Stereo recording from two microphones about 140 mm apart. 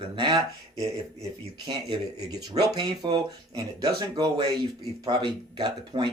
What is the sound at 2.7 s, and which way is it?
Speech, 30° right (ahead or behind).